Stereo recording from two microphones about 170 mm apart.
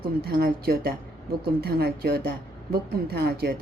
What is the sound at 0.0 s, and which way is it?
Speech, 65° right (ahead or behind).